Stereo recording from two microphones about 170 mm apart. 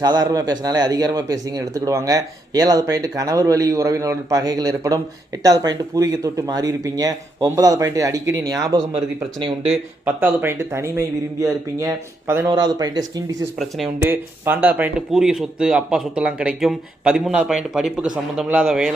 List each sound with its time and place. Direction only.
0.0 s speech: 25° right (ahead or behind)
8.9 s speech: 35° right (ahead or behind)
9.7 s speech: 10° right (ahead or behind)
13.6 s speech: centre (ahead or behind)